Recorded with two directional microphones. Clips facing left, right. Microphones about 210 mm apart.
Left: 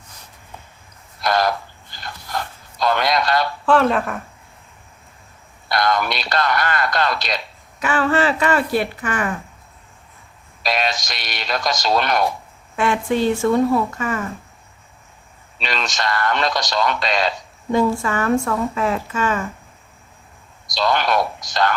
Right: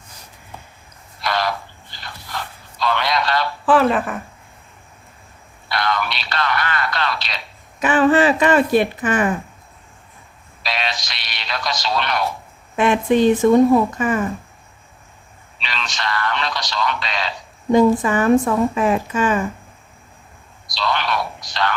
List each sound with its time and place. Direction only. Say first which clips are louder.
1.2 s a sound: left 3 dB; 45° left (ahead or behind)
3.7 s speech: right 1 dB; 5° right (ahead or behind)
5.6 s radio: left 3 dB; 45° left (ahead or behind)
7.8 s speech: right 4 dB; 20° right (ahead or behind)
10.6 s speech: left 4 dB; 45° left (ahead or behind)
12.7 s speech: right 4 dB; 20° right (ahead or behind)
15.6 s a man's voice: left 3 dB; 45° left (ahead or behind)
17.7 s a woman's voice: right 4 dB; 20° right (ahead or behind)
20.7 s a man's voice: left 3 dB; 45° left (ahead or behind)